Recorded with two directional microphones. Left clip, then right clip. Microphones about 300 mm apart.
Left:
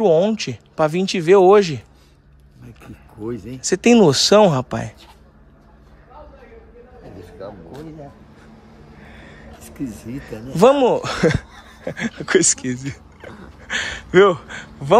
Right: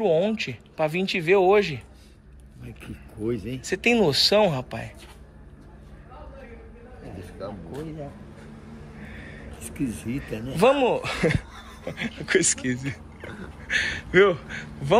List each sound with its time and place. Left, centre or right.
0.0 s speech: left
3.6 s speech: left
7.2 s vehicle: left
9.0 s a sound: centre
10.1 s speech: left